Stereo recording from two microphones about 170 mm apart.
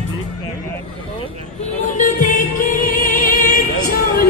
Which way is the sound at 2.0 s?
50° left (ahead or behind).